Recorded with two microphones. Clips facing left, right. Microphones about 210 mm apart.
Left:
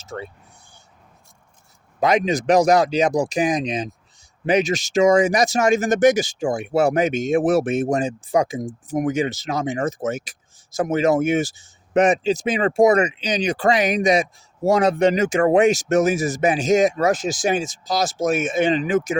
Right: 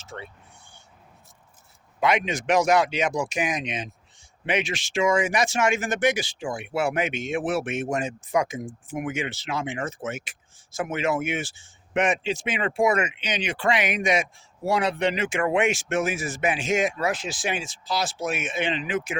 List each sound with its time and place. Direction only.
0.0 s speech: 40° left (ahead or behind)
2.0 s speech: 40° left (ahead or behind)